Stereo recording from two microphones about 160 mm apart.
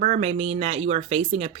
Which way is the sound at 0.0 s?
45° right (ahead or behind).